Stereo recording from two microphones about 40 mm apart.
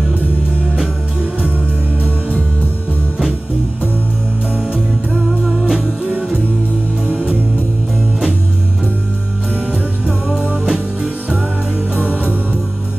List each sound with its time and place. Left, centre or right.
5.4 s music: centre
6.0 s music: right
10.4 s music: right
11.9 s music: left